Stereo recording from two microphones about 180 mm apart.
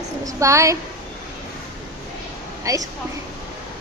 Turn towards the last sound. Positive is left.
turn(degrees=-20)  # may be behind; listen again after turning